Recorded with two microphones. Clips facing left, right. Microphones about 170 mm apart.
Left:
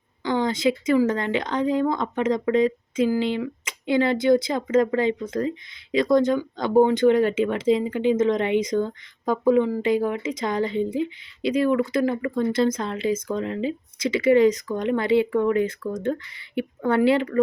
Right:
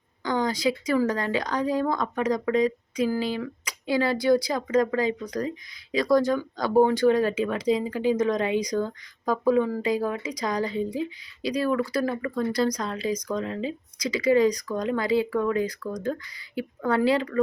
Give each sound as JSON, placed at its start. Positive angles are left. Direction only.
{"t": 0.3, "sound": "speech", "side_deg": 25}